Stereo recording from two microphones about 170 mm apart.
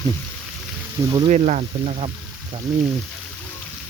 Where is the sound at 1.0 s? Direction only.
25° right (ahead or behind).